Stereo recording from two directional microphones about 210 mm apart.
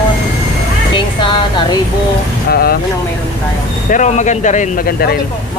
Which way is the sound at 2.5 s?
45° left (ahead or behind).